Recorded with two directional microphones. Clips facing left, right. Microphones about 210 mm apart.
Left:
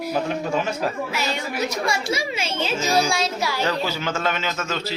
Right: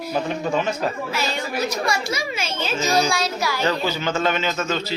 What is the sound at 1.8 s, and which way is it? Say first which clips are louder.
Speech: even; 30° left (ahead or behind).